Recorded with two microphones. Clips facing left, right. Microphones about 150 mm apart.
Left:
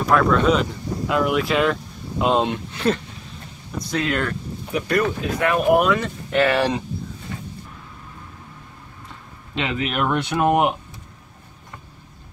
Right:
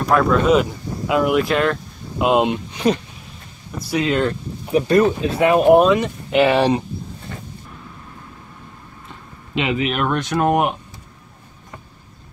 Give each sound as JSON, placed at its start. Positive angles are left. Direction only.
{"t": 0.1, "sound": "speech", "side_deg": -5}
{"t": 4.0, "sound": "speech", "side_deg": -20}
{"t": 9.6, "sound": "speech", "side_deg": -5}
{"t": 10.1, "sound": "speech", "side_deg": 10}